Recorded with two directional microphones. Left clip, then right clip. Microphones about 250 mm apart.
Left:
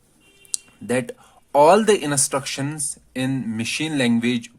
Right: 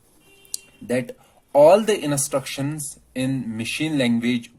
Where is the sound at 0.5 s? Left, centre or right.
Left.